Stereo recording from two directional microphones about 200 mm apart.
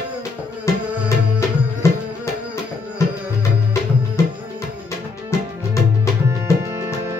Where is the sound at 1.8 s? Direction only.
15° left (ahead or behind).